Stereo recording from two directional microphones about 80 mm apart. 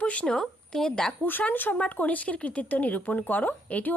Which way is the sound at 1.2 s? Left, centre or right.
Left.